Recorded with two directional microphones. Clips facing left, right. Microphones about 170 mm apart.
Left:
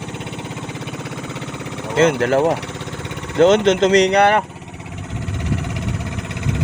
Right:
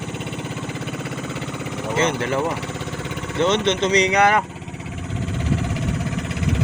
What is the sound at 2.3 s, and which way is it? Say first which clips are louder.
Speech: left 7 dB; 75° left (ahead or behind).